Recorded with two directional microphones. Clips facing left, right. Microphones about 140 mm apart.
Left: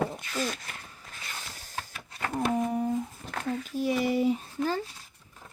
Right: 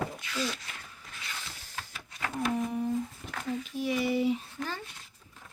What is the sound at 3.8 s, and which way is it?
Speech, 40° left (ahead or behind).